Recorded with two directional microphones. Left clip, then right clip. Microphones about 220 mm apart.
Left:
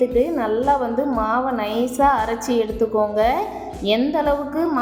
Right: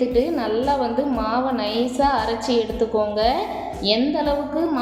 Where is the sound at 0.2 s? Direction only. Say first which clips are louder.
Left 1 dB; 15° left (ahead or behind).